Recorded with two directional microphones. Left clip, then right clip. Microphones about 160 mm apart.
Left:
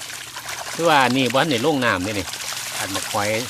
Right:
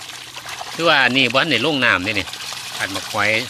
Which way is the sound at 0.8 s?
15° left (ahead or behind).